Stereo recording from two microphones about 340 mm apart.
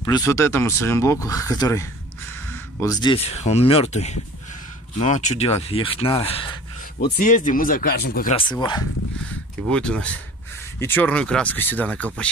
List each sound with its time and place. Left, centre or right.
0.0 s speech: centre